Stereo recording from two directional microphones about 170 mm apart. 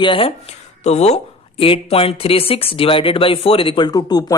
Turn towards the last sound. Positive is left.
turn(degrees=20)  # may be behind; listen again after turning